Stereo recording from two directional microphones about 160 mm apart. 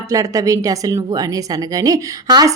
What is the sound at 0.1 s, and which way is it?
A woman's voice, 20° right (ahead or behind).